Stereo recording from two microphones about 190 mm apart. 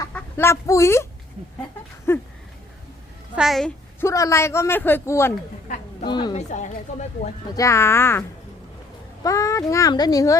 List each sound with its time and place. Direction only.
0.1 s speech: 10° left (ahead or behind)
2.1 s a sound: 15° left (ahead or behind)
3.3 s speech: centre (ahead or behind)
4.0 s a man's voice: 15° left (ahead or behind)
6.1 s a woman's voice: 25° left (ahead or behind)
6.3 s a woman's voice: 40° left (ahead or behind)
7.5 s a man's voice: 15° left (ahead or behind)
9.2 s a man's voice: 15° left (ahead or behind)